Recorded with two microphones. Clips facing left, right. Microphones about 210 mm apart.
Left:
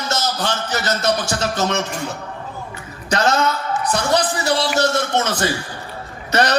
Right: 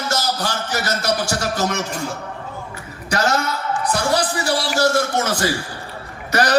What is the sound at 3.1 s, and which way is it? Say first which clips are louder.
Speech: left 1 dB; 20° left (ahead or behind).